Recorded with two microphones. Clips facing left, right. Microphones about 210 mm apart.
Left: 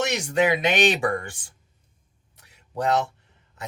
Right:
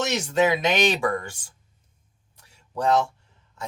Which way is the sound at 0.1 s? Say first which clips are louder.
Even; 15° left (ahead or behind).